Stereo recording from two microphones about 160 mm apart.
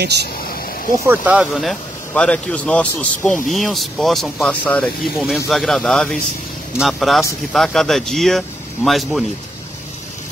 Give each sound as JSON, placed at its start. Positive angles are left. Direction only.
{"t": 0.0, "sound": "speech", "side_deg": -90}
{"t": 1.0, "sound": "speech", "side_deg": -10}
{"t": 3.5, "sound": "speech", "side_deg": 0}
{"t": 5.1, "sound": "speech", "side_deg": -5}